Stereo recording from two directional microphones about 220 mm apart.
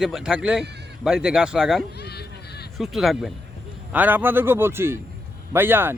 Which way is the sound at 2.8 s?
Centre (ahead or behind).